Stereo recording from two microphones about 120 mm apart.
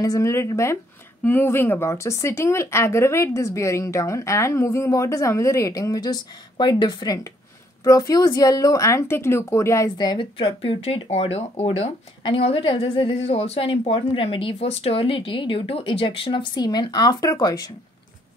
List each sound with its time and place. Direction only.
0.0 s a woman's voice: 25° left (ahead or behind); by 11.9 s 60° left (ahead or behind)
12.4 s a woman's voice: 50° left (ahead or behind); by 17.6 s 35° left (ahead or behind)